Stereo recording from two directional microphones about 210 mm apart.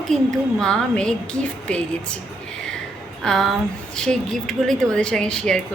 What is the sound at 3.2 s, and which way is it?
A woman's voice, centre (ahead or behind).